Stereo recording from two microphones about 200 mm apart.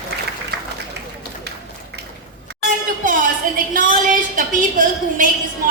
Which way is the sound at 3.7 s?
40° right (ahead or behind).